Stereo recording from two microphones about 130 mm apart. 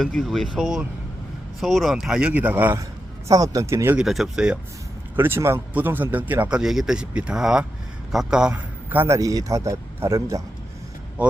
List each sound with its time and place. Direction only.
0.0 s speech: centre (ahead or behind)
3.2 s a man's voice: 25° right (ahead or behind)
3.9 s speech: centre (ahead or behind)
5.1 s a man's voice: 15° right (ahead or behind)
11.2 s speech: 10° right (ahead or behind)